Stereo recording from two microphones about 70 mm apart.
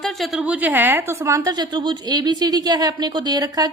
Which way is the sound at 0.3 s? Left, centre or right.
Right.